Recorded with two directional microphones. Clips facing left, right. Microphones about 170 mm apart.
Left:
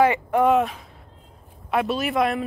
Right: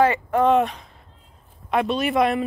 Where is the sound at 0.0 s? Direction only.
15° left (ahead or behind).